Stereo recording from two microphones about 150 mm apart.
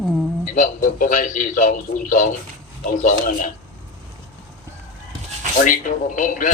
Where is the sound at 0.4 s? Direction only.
60° left (ahead or behind).